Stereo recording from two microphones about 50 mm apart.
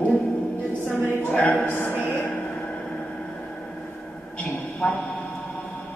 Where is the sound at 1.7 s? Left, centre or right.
Left.